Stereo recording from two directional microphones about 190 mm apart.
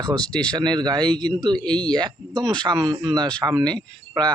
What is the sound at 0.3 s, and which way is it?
Speech, 5° left (ahead or behind).